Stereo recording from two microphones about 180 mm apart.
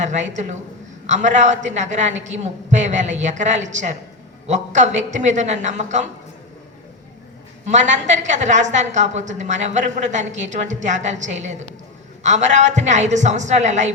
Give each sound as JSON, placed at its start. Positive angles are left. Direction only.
{"t": 0.0, "sound": "a woman's voice", "side_deg": -40}
{"t": 7.6, "sound": "a woman's voice", "side_deg": -40}